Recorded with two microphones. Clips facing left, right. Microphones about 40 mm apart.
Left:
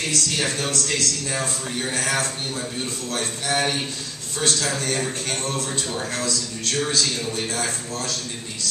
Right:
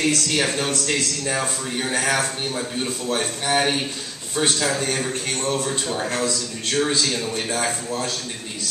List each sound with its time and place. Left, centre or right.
0.1 s a man's voice: right
5.0 s speech: centre
5.5 s a man's voice: centre